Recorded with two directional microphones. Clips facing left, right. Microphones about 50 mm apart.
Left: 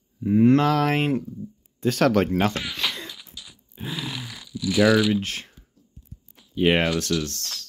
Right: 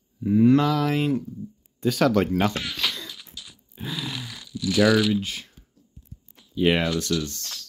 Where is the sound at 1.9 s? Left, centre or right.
Left.